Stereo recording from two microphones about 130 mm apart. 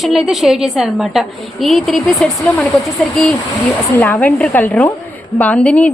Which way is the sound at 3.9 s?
15° left (ahead or behind).